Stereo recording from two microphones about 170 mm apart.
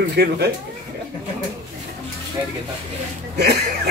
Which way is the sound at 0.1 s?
70° right (ahead or behind).